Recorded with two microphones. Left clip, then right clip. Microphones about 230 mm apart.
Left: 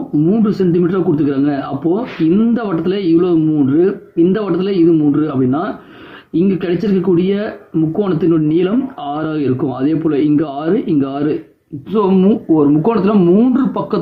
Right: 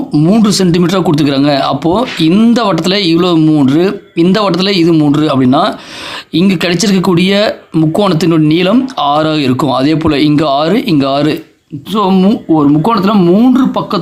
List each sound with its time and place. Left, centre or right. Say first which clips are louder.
0.3 s speech: right 5 dB; right
11.9 s speech: right 2 dB; right